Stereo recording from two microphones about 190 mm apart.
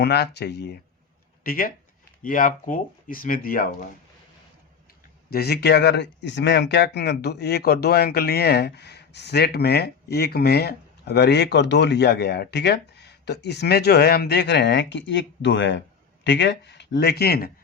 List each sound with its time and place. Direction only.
0.0 s speech: 60° left (ahead or behind)
1.5 s speech: 50° left (ahead or behind)
5.3 s speech: 55° left (ahead or behind)